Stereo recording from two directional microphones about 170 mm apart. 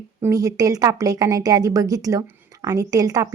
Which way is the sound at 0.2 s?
20° right (ahead or behind).